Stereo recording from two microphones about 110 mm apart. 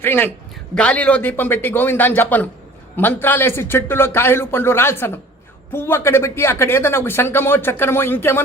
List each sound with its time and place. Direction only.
0.0 s a man's voice: 20° left (ahead or behind)